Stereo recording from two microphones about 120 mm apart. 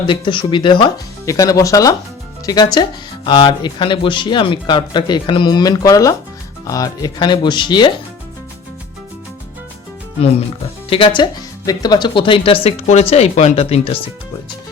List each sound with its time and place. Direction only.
0.0 s speech: 45° left (ahead or behind)
1.2 s speech: 30° left (ahead or behind)
10.8 s speech: 50° left (ahead or behind)
11.6 s speech: 30° left (ahead or behind); by 14.0 s 55° left (ahead or behind)